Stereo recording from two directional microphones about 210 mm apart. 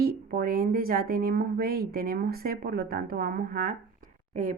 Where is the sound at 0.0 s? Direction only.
45° right (ahead or behind).